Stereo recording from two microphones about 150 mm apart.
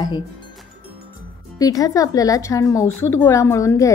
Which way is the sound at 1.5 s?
25° left (ahead or behind).